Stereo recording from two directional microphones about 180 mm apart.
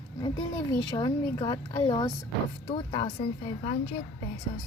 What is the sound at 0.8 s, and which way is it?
A woman's voice, 25° left (ahead or behind).